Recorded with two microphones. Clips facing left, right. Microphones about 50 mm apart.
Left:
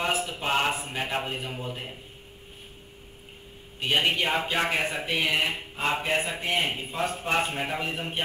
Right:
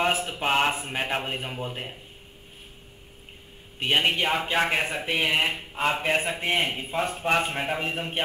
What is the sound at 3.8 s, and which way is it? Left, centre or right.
A man's voice, centre.